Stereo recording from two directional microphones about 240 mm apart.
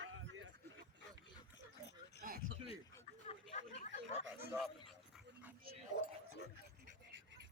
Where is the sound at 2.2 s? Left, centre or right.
Right.